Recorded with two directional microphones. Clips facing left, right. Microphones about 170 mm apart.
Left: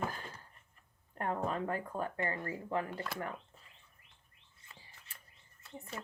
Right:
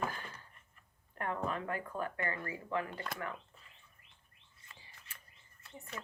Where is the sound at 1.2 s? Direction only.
35° left (ahead or behind).